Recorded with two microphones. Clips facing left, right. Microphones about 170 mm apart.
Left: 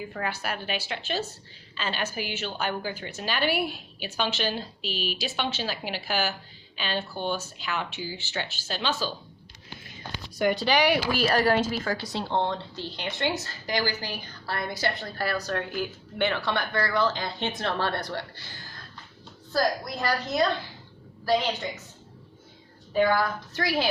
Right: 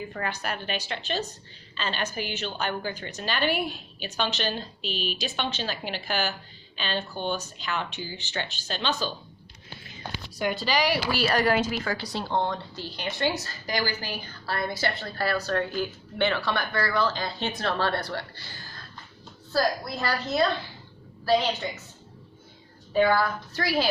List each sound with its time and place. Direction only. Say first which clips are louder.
0.1 s a woman's voice: even; 5° left (ahead or behind)
10.3 s a woman's voice: left 3 dB; 60° left (ahead or behind); by 11.9 s 40° left (ahead or behind)
12.0 s a woman's voice: right 1 dB; 25° left (ahead or behind)
19.5 s a woman's voice: even; 20° left (ahead or behind)
23.1 s a woman's voice: right 1 dB; 20° left (ahead or behind)